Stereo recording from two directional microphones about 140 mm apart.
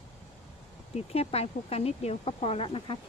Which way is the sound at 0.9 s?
45° left (ahead or behind).